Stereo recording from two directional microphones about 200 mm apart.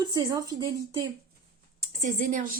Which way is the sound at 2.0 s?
40° right (ahead or behind).